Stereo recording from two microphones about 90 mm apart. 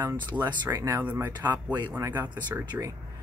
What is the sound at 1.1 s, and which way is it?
Speech, 20° right (ahead or behind).